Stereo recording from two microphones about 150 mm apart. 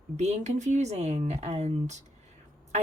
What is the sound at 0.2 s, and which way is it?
Speech, 50° right (ahead or behind).